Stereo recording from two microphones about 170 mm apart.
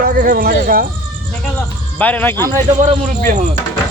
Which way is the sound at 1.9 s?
10° left (ahead or behind).